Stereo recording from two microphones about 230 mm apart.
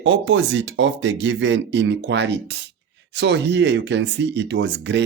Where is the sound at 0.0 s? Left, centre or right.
Right.